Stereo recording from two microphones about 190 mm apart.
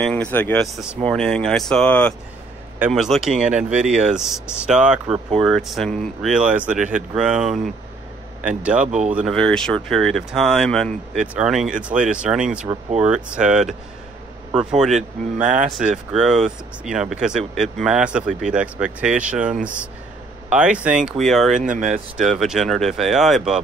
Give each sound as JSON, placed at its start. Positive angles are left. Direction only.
{"t": 0.0, "sound": "speech", "side_deg": 5}
{"t": 8.8, "sound": "speech", "side_deg": -40}
{"t": 9.1, "sound": "speech", "side_deg": 0}
{"t": 14.8, "sound": "speech", "side_deg": 0}
{"t": 15.4, "sound": "speech", "side_deg": -40}
{"t": 15.8, "sound": "speech", "side_deg": -5}
{"t": 21.5, "sound": "speech", "side_deg": -40}
{"t": 22.1, "sound": "speech", "side_deg": 0}